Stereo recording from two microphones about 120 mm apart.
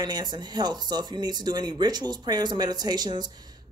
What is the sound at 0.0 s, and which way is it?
Speech, 35° right (ahead or behind).